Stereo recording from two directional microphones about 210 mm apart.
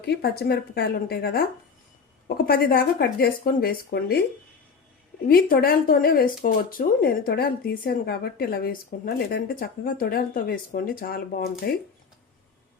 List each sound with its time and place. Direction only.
0.0 s speech: 50° left (ahead or behind)
5.3 s speech: 45° left (ahead or behind)